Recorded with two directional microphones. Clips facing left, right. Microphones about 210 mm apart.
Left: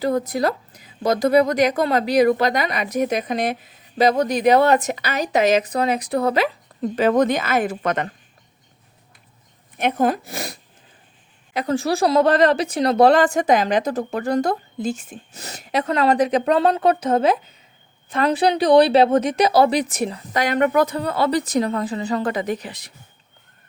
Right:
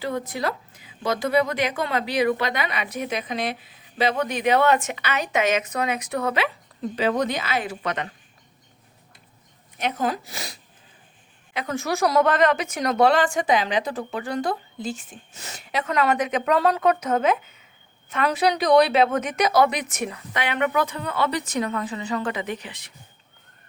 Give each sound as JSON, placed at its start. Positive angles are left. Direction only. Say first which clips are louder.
{"t": 0.0, "sound": "a woman's voice", "louder": "left 6 dB", "side_deg": 40}
{"t": 9.7, "sound": "speech", "louder": "left 6 dB", "side_deg": 55}
{"t": 11.5, "sound": "a woman's voice", "louder": "left 6 dB", "side_deg": 35}